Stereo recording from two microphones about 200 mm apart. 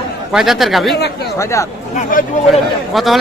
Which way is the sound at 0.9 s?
55° left (ahead or behind).